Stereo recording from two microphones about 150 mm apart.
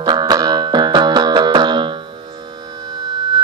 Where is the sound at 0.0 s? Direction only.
25° right (ahead or behind).